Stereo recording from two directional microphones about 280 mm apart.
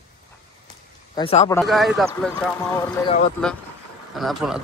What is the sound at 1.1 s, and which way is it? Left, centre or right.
Speech, left.